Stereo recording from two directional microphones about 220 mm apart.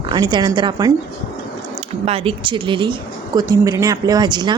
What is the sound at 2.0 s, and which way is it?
A woman's voice, 25° right (ahead or behind).